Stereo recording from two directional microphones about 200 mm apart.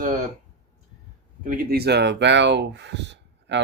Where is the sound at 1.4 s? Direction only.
50° right (ahead or behind).